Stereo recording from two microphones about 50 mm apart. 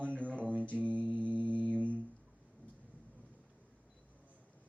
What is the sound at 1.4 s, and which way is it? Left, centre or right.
Mantra, left.